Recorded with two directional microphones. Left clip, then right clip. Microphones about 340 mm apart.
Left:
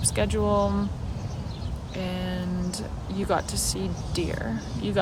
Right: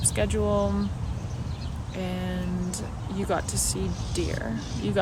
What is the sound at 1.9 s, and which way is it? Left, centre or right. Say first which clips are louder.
Speech: left 1 dB; centre.